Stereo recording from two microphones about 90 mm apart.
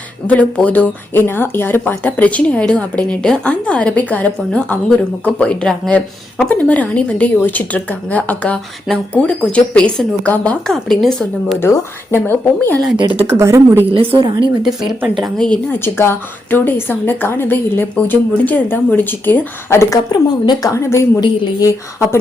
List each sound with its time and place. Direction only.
0.3 s speech: 15° left (ahead or behind)
11.6 s a woman's voice: 30° left (ahead or behind)
13.0 s speech: 65° right (ahead or behind)
13.2 s a woman's voice: 30° right (ahead or behind)
13.9 s a woman's voice: 85° right
14.6 s speech: 5° right (ahead or behind)
15.2 s speech: 5° left (ahead or behind)
15.8 s a woman's voice: 25° left (ahead or behind)
20.1 s a woman's voice: 50° left (ahead or behind)
20.7 s speech: 30° left (ahead or behind)